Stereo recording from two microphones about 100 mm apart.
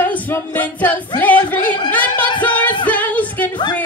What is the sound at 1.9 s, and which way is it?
Music, 15° left (ahead or behind).